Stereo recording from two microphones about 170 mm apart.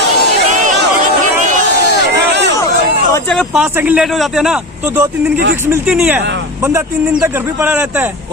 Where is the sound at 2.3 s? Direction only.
90° right.